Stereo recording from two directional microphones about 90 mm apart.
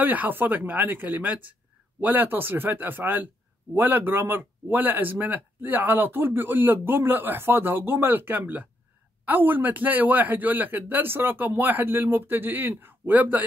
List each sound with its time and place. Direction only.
0.0 s speech: 20° right (ahead or behind)